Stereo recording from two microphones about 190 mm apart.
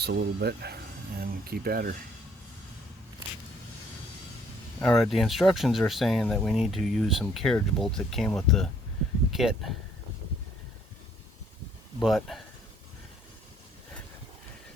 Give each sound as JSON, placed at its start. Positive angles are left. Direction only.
{"t": 0.0, "sound": "speech", "side_deg": -60}
{"t": 4.8, "sound": "speech", "side_deg": 0}
{"t": 11.9, "sound": "speech", "side_deg": 0}